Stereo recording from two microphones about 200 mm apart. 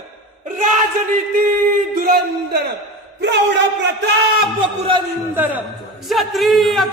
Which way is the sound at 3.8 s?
60° right (ahead or behind).